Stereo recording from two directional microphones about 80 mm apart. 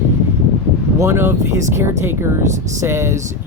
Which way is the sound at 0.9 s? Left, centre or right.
Right.